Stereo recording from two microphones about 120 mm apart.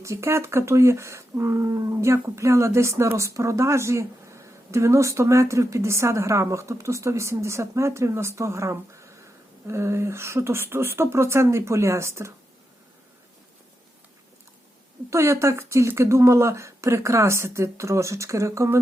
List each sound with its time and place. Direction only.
0.0 s speech: 25° right (ahead or behind)
15.1 s speech: 25° right (ahead or behind)